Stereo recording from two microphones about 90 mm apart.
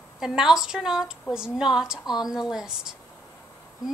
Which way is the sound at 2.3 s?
5° right (ahead or behind).